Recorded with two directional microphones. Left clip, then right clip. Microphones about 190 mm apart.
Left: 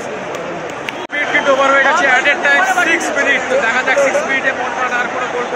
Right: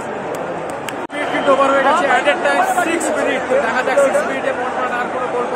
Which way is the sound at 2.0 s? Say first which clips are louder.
Left 2 dB; 5° right (ahead or behind).